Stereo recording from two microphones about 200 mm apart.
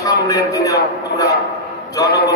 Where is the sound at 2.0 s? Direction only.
50° left (ahead or behind).